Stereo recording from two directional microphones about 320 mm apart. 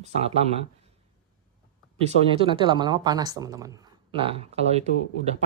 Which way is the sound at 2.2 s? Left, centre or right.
Centre.